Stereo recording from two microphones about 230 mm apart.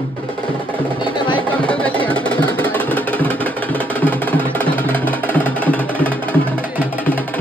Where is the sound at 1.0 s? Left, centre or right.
Centre.